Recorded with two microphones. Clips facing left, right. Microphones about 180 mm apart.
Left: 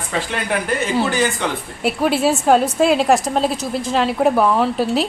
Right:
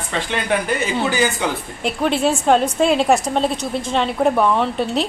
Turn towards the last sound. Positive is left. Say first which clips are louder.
# left 2 dB
turn(degrees=0)  # may be behind; listen again after turning